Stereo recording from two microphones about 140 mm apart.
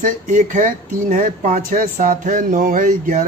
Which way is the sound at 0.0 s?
70° right (ahead or behind).